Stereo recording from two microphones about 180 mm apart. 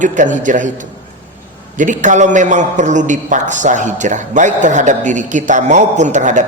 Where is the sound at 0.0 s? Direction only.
45° right (ahead or behind).